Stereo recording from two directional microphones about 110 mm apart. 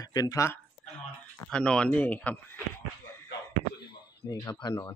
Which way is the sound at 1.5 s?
10° left (ahead or behind).